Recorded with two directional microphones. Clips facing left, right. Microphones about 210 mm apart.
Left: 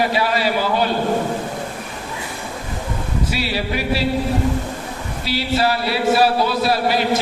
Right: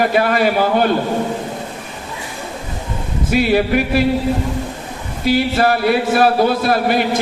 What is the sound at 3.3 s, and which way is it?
Speech, 50° right (ahead or behind).